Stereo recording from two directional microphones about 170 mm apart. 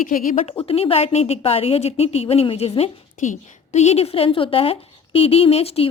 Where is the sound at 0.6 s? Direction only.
35° left (ahead or behind).